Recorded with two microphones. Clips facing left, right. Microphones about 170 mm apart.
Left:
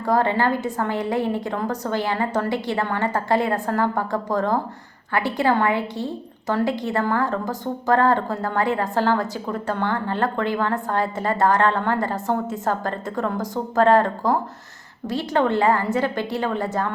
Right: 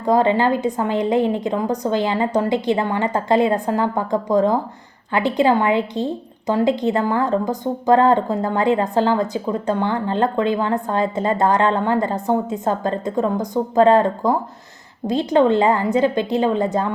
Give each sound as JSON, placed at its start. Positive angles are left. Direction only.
{"t": 0.0, "sound": "a woman's voice", "side_deg": -20}